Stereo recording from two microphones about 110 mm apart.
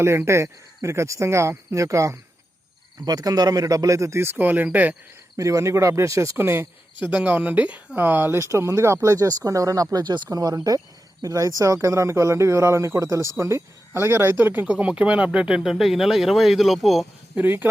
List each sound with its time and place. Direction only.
0.0 s speech: 25° right (ahead or behind)
5.4 s speech: 30° right (ahead or behind); by 17.1 s centre (ahead or behind)
17.3 s speech: 15° right (ahead or behind)